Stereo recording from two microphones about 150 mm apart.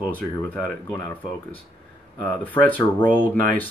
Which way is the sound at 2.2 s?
10° left (ahead or behind).